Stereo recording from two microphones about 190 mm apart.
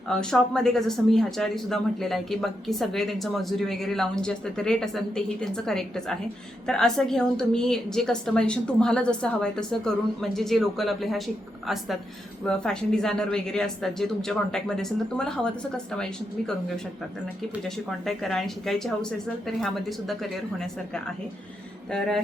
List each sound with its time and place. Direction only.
0.1 s speech: 5° left (ahead or behind)
17.6 s speech: centre (ahead or behind)
21.8 s speech: 5° left (ahead or behind)